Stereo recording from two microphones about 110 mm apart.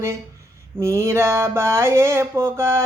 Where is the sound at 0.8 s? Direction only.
25° right (ahead or behind).